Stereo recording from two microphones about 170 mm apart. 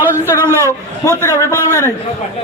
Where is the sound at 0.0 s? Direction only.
15° right (ahead or behind).